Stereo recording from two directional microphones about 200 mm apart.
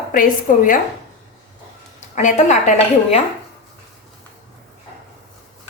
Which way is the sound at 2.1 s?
35° left (ahead or behind).